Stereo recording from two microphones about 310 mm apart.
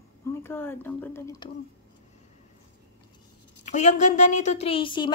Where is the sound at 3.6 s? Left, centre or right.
Left.